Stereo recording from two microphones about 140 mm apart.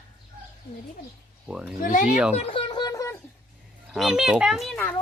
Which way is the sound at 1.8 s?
75° left (ahead or behind).